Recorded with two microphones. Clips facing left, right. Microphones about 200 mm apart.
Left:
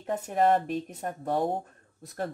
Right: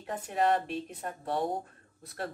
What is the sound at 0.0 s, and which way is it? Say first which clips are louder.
Speech: left 4 dB; 45° left (ahead or behind).